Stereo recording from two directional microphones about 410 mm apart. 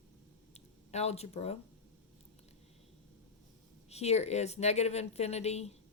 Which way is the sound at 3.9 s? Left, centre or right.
Centre.